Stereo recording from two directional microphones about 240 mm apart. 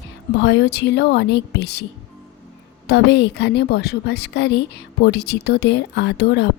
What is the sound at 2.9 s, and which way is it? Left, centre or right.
A woman's voice, left.